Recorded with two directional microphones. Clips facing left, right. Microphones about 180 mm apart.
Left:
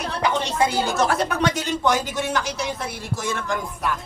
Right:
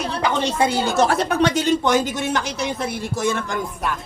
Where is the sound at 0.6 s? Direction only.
25° right (ahead or behind).